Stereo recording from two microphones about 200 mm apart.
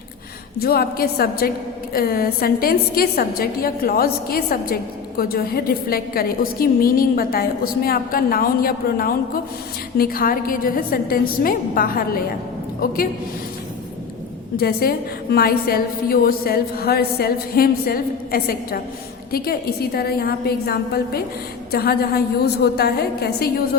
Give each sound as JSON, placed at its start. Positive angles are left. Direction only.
{"t": 0.6, "sound": "a woman's voice", "side_deg": 50}
{"t": 14.5, "sound": "a woman's voice", "side_deg": 50}